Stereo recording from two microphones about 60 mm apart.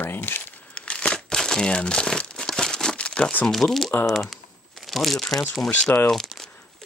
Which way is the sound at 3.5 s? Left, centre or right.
Centre.